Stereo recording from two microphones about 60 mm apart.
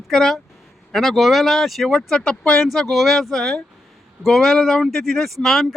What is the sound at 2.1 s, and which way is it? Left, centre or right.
Speech, centre.